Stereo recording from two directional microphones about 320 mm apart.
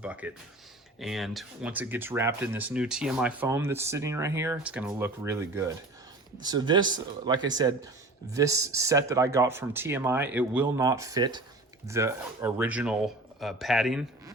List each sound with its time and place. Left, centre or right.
0.0 s speech: centre